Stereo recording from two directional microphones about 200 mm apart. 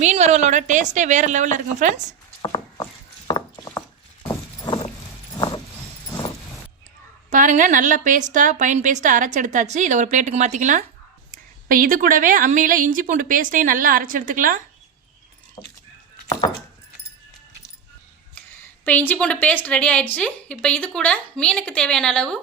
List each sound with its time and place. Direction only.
0.0 s a woman's voice: 35° right (ahead or behind)
2.4 s a sound: 20° left (ahead or behind)
3.2 s mechanisms: 25° left (ahead or behind)
4.3 s clip-clop: 20° left (ahead or behind)
7.3 s a woman's voice: 40° right (ahead or behind)
15.6 s keys jangling: 20° left (ahead or behind)
18.9 s a woman's voice: 10° left (ahead or behind)